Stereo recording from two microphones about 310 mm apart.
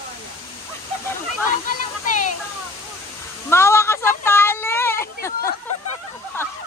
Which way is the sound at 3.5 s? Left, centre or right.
Centre.